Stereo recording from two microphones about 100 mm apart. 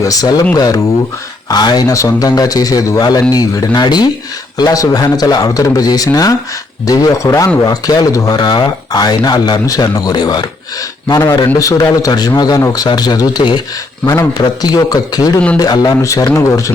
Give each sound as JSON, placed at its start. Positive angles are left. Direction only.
{"t": 0.0, "sound": "speech", "side_deg": 35}
{"t": 11.6, "sound": "speech", "side_deg": 35}
{"t": 14.0, "sound": "speech", "side_deg": 35}